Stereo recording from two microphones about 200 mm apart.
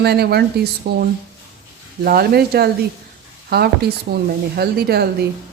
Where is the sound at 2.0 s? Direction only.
50° right (ahead or behind).